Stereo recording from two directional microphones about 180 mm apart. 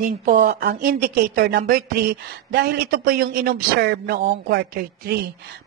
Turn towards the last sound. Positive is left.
turn(degrees=-60)  # may be behind; listen again after turning